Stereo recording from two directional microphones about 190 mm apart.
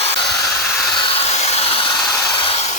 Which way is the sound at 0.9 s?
30° left (ahead or behind).